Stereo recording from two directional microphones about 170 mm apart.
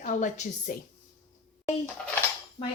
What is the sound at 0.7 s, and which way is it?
Speech, 60° left (ahead or behind).